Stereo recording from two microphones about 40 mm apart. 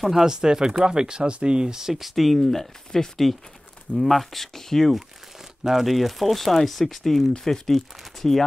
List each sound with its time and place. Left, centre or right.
0.0 s speech: centre
0.3 s speech: centre
2.0 s speech: centre
3.9 s speech: centre
5.6 s speech: centre